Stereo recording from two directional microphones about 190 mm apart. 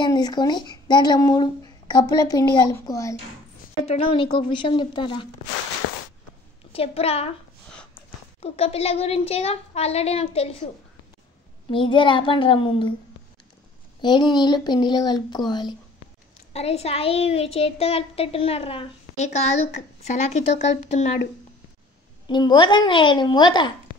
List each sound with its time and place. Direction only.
0.0 s speech: 20° left (ahead or behind)
3.8 s speech: 30° left (ahead or behind)
6.7 s a woman's voice: 30° left (ahead or behind)
8.4 s a woman's voice: 30° left (ahead or behind)
11.7 s speech: 25° left (ahead or behind)
14.0 s speech: 25° left (ahead or behind)
16.5 s a woman's voice: 35° left (ahead or behind)
22.3 s speech: 25° left (ahead or behind)